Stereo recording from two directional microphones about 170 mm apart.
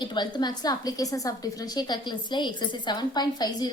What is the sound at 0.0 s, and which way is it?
A woman's voice, 25° left (ahead or behind).